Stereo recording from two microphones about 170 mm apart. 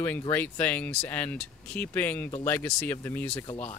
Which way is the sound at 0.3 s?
10° left (ahead or behind).